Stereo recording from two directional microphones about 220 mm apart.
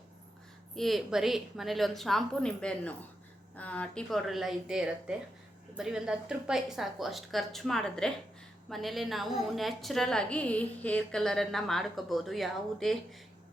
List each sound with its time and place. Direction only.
0.8 s a woman's voice: centre (ahead or behind)